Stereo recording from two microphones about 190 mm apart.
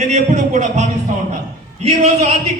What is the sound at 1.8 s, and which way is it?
Speech, 35° right (ahead or behind).